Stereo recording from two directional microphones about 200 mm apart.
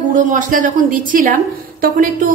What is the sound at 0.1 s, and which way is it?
A woman's voice, 40° right (ahead or behind).